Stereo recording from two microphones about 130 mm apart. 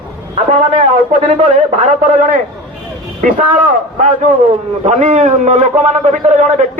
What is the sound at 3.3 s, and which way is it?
A man's voice, 75° right (ahead or behind).